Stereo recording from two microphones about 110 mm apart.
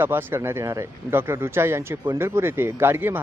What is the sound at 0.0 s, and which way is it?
A man's voice, 20° right (ahead or behind).